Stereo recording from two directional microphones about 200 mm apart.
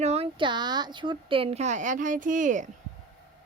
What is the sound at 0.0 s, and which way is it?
Speech, 30° right (ahead or behind).